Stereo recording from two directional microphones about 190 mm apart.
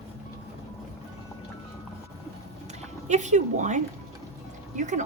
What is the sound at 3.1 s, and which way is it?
A woman's voice, 40° right (ahead or behind).